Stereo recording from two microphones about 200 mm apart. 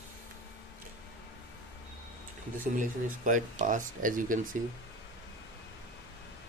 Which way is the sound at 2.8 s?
40° right (ahead or behind).